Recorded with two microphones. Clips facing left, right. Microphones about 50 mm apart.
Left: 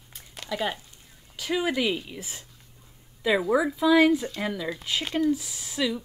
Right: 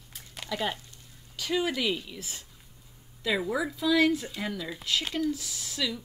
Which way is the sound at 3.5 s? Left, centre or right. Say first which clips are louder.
Left 6 dB; centre.